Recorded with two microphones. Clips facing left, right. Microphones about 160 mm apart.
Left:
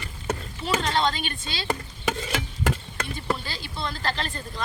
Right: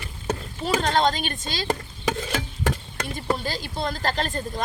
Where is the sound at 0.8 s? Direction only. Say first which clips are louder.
Right 3 dB; 45° right (ahead or behind).